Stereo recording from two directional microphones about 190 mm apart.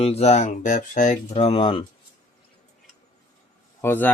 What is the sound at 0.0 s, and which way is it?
Speech, 30° left (ahead or behind).